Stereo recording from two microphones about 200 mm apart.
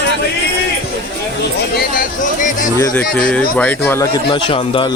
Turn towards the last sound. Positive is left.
turn(degrees=25)  # may be behind; listen again after turning